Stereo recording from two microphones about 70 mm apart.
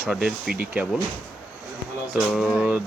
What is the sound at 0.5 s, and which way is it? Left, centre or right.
Speech, right.